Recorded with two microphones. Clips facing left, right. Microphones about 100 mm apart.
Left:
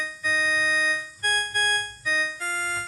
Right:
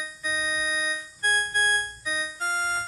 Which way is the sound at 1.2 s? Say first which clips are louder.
Right 2 dB; 60° left (ahead or behind).